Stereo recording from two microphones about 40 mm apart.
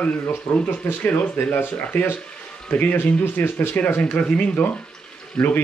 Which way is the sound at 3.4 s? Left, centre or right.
Left.